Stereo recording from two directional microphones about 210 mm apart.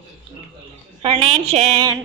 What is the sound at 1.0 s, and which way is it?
Speech, 30° right (ahead or behind).